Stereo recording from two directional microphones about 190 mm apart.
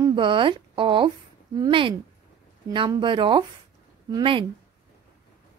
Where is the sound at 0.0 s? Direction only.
25° right (ahead or behind).